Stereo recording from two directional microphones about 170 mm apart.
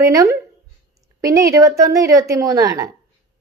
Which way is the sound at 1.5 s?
20° right (ahead or behind).